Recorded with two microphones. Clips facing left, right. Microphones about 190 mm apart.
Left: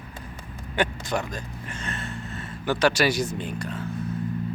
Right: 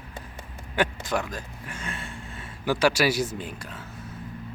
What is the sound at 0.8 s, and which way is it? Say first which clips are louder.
Speech: even; 5° right (ahead or behind).